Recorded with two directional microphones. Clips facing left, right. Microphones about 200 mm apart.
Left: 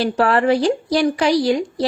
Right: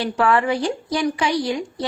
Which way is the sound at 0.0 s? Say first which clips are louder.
Left 3 dB; 35° left (ahead or behind).